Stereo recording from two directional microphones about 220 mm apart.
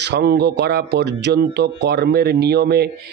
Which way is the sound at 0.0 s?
50° right (ahead or behind).